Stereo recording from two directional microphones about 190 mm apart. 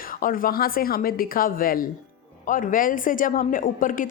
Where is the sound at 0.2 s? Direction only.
45° left (ahead or behind).